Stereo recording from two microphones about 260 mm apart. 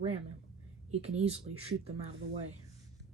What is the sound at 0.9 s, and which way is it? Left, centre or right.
Speech, right.